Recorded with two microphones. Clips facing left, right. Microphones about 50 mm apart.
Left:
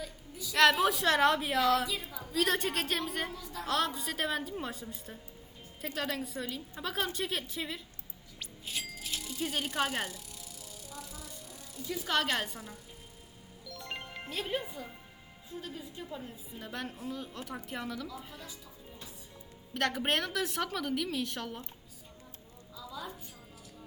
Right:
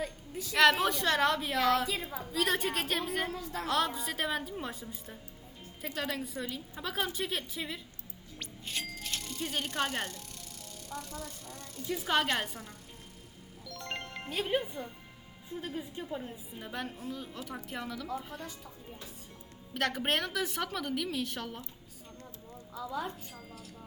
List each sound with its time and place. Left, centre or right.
0.0 s a sound: right
0.5 s a woman's voice: centre
3.3 s a woman's voice: right
3.7 s a woman's voice: centre
10.9 s speech: right
11.9 s a woman's voice: centre
13.7 s music: centre
14.4 s a woman's voice: right
16.6 s a woman's voice: centre
19.7 s a woman's voice: centre
22.7 s a woman's voice: right